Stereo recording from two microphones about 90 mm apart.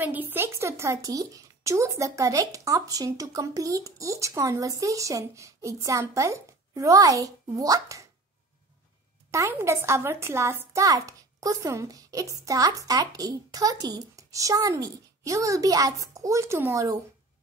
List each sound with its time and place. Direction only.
0.0 s speech: 20° right (ahead or behind); by 8.1 s 40° right (ahead or behind)
9.3 s speech: 30° right (ahead or behind)